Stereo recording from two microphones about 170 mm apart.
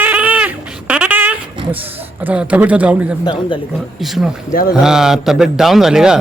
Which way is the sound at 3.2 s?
25° left (ahead or behind).